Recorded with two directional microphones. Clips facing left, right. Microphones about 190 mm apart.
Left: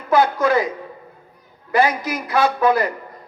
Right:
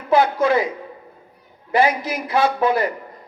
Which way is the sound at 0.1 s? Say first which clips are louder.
Even; 25° right (ahead or behind).